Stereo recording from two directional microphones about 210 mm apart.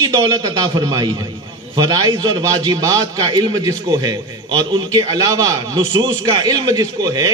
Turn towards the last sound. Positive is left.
turn(degrees=-20)  # may be behind; listen again after turning